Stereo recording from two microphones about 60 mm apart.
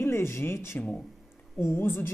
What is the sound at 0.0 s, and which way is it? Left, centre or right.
A woman's voice, left.